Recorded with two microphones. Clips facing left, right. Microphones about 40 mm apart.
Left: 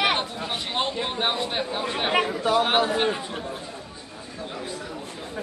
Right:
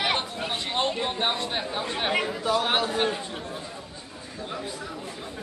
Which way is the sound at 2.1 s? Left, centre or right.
Left.